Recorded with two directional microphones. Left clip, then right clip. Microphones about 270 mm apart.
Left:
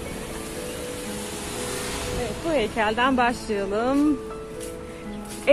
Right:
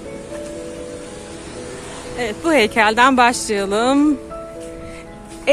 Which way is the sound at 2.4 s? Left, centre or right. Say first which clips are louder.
Right 9 dB; right.